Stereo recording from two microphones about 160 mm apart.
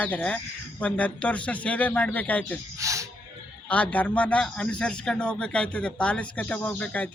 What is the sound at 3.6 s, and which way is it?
A man's voice, 10° left (ahead or behind).